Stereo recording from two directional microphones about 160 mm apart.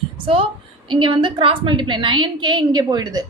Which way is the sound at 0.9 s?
30° right (ahead or behind).